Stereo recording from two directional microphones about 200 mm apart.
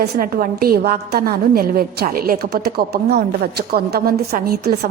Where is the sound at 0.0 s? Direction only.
45° right (ahead or behind).